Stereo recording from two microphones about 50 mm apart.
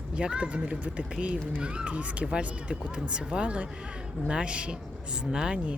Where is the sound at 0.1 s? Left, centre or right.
Right.